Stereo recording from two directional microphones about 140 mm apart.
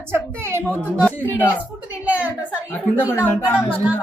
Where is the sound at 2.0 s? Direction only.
10° right (ahead or behind).